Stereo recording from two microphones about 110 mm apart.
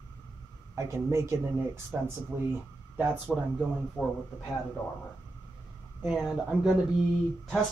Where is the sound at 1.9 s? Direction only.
10° right (ahead or behind).